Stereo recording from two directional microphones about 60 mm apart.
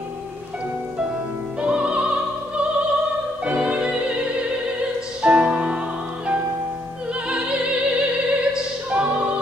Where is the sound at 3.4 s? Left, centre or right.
Centre.